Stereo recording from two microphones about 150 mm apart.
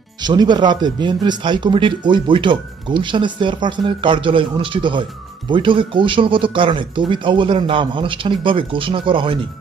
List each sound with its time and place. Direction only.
0.2 s speech: 30° right (ahead or behind)